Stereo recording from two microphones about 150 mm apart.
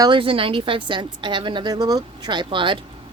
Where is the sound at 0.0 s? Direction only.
35° right (ahead or behind).